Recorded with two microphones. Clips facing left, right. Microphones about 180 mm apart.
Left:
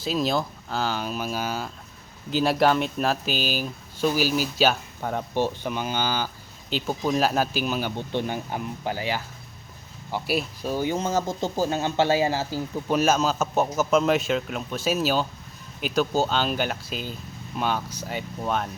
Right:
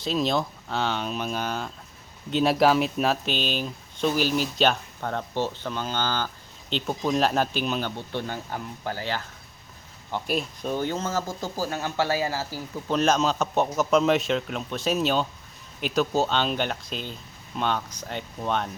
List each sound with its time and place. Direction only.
0.0 s speech: centre (ahead or behind); by 13.0 s 20° left (ahead or behind)
13.0 s speech: 5° left (ahead or behind)